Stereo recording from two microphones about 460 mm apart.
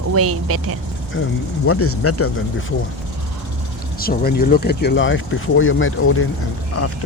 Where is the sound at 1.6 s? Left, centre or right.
Left.